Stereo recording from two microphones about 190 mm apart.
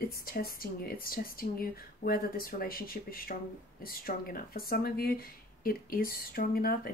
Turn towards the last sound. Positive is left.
turn(degrees=50)  # may be behind; listen again after turning